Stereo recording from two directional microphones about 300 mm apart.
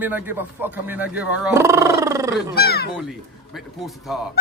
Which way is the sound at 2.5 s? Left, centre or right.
Left.